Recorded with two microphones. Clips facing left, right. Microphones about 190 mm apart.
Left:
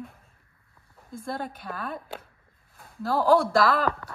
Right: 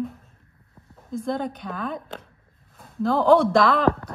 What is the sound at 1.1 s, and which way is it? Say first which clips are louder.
A woman's voice: right 7 dB; 5° left (ahead or behind).